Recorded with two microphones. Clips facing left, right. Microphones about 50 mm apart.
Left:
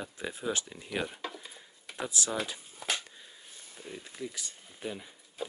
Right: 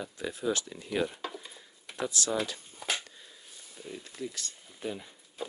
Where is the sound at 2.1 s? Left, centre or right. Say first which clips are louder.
Right 2 dB; centre.